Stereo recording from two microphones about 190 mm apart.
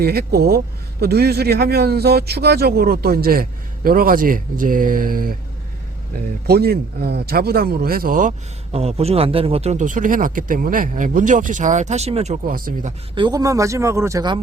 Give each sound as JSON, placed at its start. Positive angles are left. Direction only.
{"t": 0.0, "sound": "speech", "side_deg": -55}
{"t": 6.5, "sound": "speech", "side_deg": -55}
{"t": 8.7, "sound": "a man's voice", "side_deg": -35}
{"t": 13.1, "sound": "speech", "side_deg": -20}